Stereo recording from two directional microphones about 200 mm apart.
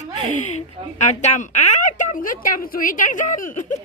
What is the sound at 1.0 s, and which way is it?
A woman's voice, 35° left (ahead or behind).